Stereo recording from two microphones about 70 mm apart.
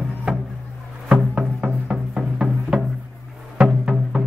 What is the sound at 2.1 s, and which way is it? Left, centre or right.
Music, centre.